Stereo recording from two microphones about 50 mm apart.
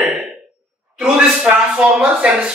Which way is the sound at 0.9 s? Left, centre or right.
Centre.